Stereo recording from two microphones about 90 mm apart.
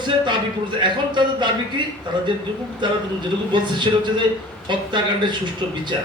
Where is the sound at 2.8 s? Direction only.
60° right (ahead or behind).